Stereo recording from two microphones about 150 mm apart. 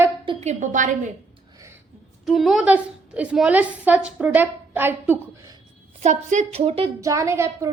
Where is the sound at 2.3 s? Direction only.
Centre (ahead or behind).